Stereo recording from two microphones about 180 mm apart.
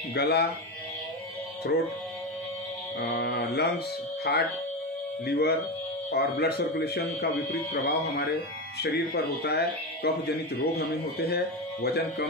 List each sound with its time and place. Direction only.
0.1 s speech: 60° left (ahead or behind)
3.0 s speech: 65° left (ahead or behind)